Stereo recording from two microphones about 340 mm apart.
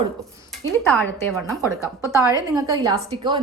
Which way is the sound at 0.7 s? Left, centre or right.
Centre.